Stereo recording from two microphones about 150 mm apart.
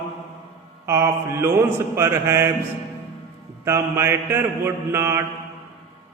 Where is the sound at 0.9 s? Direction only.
15° right (ahead or behind).